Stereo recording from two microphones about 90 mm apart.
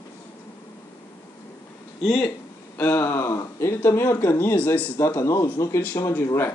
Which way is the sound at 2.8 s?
25° left (ahead or behind).